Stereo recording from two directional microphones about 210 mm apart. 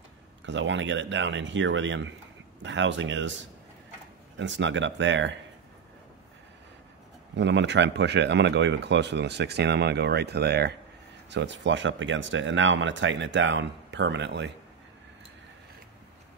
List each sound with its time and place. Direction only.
0.5 s speech: 60° right (ahead or behind)
4.4 s speech: 60° right (ahead or behind)
7.3 s speech: 60° right (ahead or behind)